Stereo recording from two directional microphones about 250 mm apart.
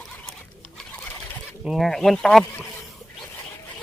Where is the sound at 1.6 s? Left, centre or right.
Centre.